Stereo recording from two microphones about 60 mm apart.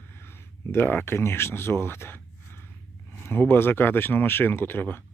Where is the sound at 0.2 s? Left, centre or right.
Left.